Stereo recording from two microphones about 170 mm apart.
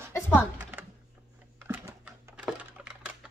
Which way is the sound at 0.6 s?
10° right (ahead or behind).